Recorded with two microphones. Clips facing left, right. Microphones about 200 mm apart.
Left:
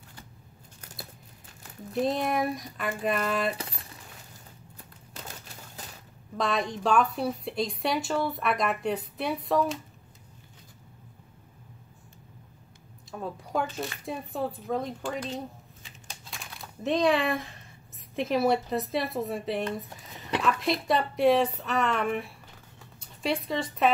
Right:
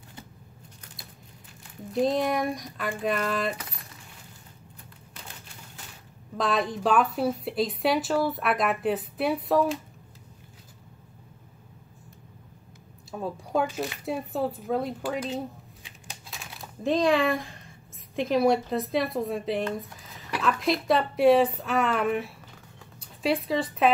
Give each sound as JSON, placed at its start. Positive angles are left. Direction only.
{"t": 1.9, "sound": "a woman's voice", "side_deg": 0}
{"t": 6.3, "sound": "a woman's voice", "side_deg": 0}
{"t": 13.1, "sound": "a woman's voice", "side_deg": -5}